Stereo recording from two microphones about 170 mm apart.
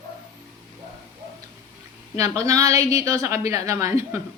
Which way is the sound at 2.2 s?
20° right (ahead or behind).